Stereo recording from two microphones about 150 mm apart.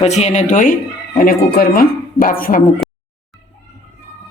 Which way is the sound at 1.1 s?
80° left.